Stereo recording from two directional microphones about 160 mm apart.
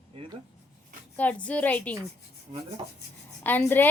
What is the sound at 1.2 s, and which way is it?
Speech, 10° left (ahead or behind).